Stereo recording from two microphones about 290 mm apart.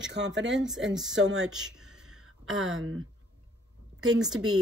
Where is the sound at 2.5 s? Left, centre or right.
Right.